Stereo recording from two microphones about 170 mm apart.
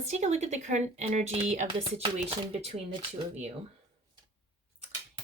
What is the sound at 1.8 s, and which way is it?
Speech, 30° right (ahead or behind).